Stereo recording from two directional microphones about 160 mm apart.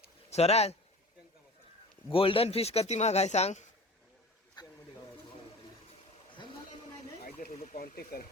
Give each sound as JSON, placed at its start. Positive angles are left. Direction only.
{"t": 0.3, "sound": "speech", "side_deg": 40}
{"t": 2.1, "sound": "speech", "side_deg": 35}
{"t": 4.6, "sound": "a sound", "side_deg": 25}
{"t": 7.3, "sound": "speech", "side_deg": 65}
{"t": 8.1, "sound": "speech", "side_deg": 70}